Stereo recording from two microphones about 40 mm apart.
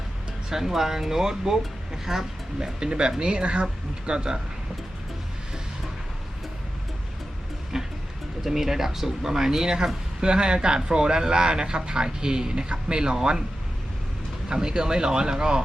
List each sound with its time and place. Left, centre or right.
0.5 s speech: centre
2.6 s speech: centre
7.7 s music: centre
8.4 s speech: centre
14.5 s speech: centre